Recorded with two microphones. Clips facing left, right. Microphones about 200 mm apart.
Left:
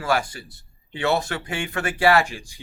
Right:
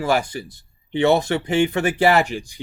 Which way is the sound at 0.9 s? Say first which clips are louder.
Right 6 dB; 20° right (ahead or behind).